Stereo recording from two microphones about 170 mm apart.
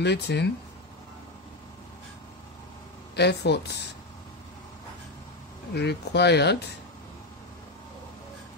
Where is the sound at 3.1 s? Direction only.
75° left (ahead or behind).